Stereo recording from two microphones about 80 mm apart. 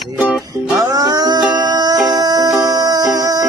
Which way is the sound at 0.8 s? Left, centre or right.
Right.